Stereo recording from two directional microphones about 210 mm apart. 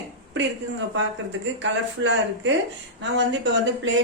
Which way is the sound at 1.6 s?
60° right (ahead or behind).